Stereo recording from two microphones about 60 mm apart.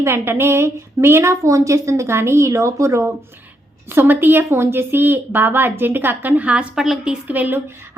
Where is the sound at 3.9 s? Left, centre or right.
Right.